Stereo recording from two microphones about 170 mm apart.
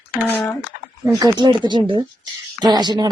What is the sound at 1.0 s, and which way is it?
Speech, 20° right (ahead or behind).